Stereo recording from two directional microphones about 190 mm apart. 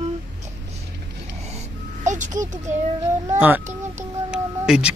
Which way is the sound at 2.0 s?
40° right (ahead or behind).